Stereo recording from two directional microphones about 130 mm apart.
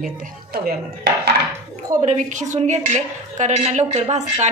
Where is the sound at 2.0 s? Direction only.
65° right (ahead or behind).